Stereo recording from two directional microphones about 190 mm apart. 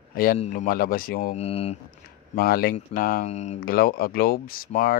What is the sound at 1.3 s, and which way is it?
Speech, 35° left (ahead or behind).